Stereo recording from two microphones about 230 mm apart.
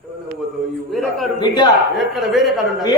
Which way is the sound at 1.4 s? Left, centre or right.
Centre.